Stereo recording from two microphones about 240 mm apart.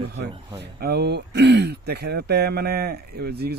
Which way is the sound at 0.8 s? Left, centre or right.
Right.